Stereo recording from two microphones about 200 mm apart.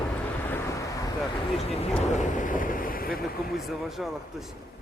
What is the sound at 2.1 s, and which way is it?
Vehicle, 40° left (ahead or behind).